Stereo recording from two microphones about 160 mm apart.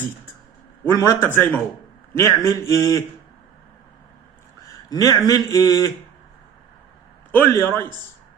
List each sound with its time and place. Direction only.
0.9 s a man's voice: 20° left (ahead or behind)
4.9 s speech: 25° left (ahead or behind)
7.3 s a man's voice: 15° left (ahead or behind)